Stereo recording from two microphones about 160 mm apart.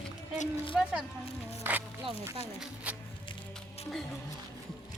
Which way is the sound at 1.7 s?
10° right (ahead or behind).